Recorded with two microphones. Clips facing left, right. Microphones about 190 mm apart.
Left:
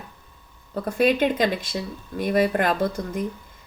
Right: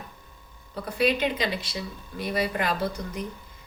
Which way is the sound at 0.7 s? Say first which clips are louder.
Left 4 dB; 50° left (ahead or behind).